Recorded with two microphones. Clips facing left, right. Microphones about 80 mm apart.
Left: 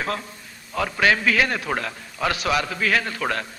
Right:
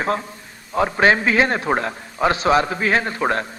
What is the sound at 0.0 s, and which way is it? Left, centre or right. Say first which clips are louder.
A man's voice: right 5 dB; right.